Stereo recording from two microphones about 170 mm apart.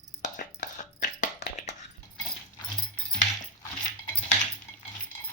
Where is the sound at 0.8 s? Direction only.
45° left (ahead or behind).